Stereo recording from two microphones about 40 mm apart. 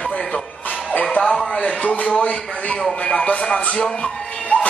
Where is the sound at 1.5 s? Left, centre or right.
Left.